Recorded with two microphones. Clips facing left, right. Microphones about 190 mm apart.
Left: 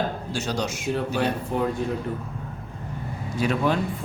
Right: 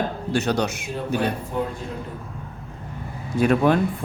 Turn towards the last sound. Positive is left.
turn(degrees=-55)  # may be behind; listen again after turning